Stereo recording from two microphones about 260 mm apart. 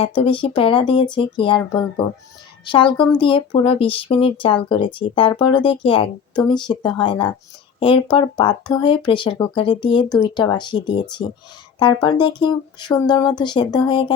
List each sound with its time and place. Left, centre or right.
0.0 s speech: centre